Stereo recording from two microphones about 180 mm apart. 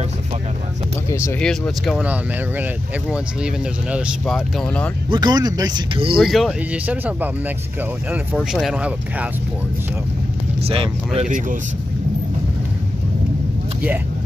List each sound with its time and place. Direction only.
1.4 s speech: centre (ahead or behind)
5.1 s speech: 20° right (ahead or behind)
6.2 s speech: centre (ahead or behind)
8.4 s speech: centre (ahead or behind)
10.7 s speech: 30° right (ahead or behind)